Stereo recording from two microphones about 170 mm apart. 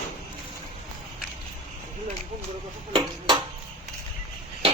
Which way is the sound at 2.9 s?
30° right (ahead or behind).